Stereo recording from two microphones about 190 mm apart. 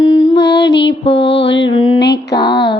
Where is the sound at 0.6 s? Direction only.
70° left (ahead or behind).